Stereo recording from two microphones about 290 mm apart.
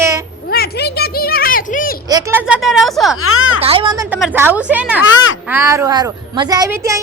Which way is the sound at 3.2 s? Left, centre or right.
Left.